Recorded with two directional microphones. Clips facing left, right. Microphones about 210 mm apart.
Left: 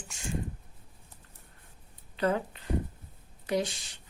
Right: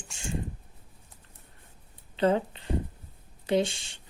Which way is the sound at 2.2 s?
25° right (ahead or behind).